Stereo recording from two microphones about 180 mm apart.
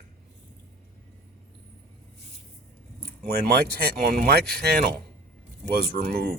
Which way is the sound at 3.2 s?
60° right (ahead or behind).